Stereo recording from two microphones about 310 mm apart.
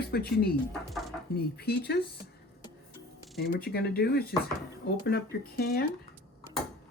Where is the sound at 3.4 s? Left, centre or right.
Left.